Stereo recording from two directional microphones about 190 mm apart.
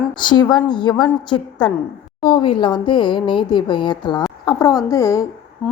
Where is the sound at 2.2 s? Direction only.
25° left (ahead or behind).